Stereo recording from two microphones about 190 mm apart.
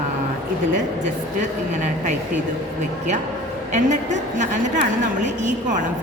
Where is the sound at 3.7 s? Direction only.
40° right (ahead or behind).